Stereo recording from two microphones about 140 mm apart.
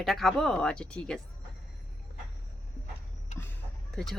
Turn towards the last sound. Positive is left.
turn(degrees=0)  # may be behind; listen again after turning